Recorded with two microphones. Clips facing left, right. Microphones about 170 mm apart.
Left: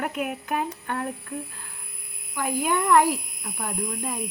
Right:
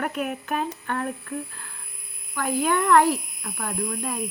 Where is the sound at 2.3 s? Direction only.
10° left (ahead or behind).